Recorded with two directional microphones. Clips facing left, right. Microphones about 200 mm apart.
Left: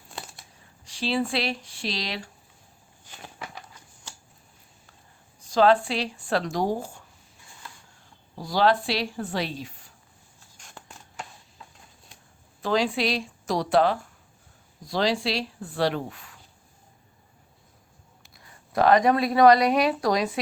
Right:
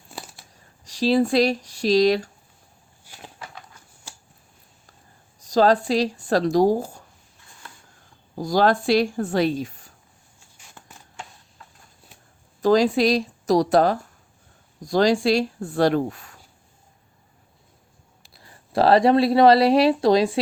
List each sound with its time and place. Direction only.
0.1 s a sound: 5° right (ahead or behind)
0.9 s speech: 40° right (ahead or behind)
3.0 s a sound: 5° right (ahead or behind)
5.4 s speech: 40° right (ahead or behind)
8.4 s a woman's voice: 45° right (ahead or behind)
12.6 s a woman's voice: 40° right (ahead or behind)
18.2 s speech: 30° right (ahead or behind)